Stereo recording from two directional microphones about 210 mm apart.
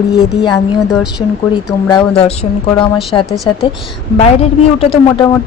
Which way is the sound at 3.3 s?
Centre (ahead or behind).